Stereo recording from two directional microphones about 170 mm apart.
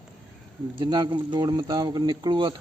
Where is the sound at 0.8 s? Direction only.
25° right (ahead or behind).